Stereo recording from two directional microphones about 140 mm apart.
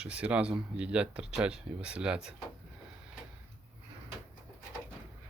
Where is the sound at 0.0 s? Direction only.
10° right (ahead or behind).